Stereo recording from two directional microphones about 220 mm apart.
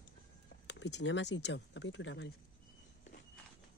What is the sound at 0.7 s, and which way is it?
Speech, 50° left (ahead or behind).